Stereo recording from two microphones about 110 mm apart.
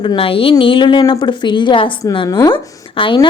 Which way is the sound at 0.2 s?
55° left (ahead or behind).